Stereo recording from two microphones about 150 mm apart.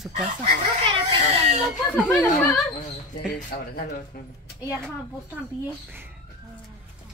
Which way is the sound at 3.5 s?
90° left.